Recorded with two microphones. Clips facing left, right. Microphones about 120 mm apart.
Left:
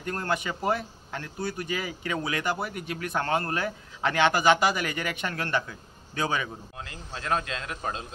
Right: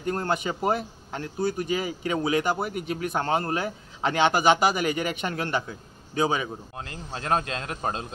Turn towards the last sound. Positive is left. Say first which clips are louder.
# right 3 dB
turn(degrees=-40)  # may be behind; listen again after turning